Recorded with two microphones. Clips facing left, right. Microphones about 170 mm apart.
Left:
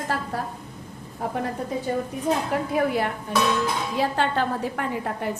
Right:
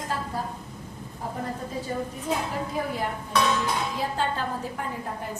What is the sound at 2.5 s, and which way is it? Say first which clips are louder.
A woman's voice: left 7 dB; 65° left (ahead or behind).